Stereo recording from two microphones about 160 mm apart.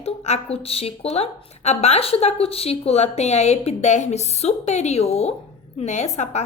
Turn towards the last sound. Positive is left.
turn(degrees=45)  # may be behind; listen again after turning